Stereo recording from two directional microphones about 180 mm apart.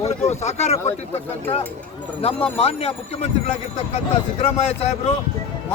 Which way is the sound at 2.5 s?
35° left (ahead or behind).